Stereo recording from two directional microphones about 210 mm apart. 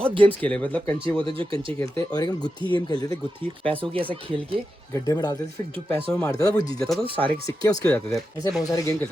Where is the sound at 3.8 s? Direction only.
25° right (ahead or behind).